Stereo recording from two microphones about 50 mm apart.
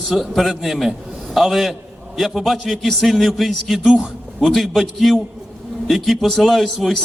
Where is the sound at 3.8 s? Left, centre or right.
Centre.